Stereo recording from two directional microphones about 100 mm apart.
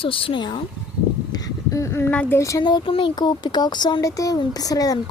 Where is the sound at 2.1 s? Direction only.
20° left (ahead or behind).